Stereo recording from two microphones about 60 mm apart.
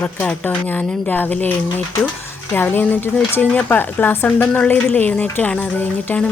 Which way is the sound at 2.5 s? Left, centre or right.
Left.